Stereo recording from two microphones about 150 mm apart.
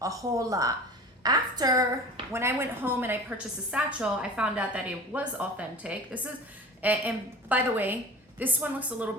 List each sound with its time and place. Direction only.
0.0 s a woman's voice: 20° right (ahead or behind)